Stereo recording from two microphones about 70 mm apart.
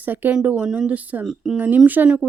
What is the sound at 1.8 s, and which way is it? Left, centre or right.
Speech, right.